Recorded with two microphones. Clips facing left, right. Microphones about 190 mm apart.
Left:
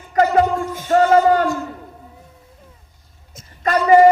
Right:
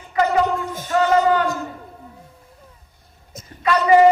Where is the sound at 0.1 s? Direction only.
45° left (ahead or behind).